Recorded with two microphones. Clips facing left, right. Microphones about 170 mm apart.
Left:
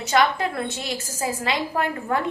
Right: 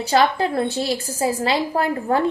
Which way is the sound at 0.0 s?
30° right (ahead or behind).